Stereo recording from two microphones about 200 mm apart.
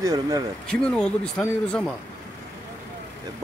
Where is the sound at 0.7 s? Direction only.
5° left (ahead or behind).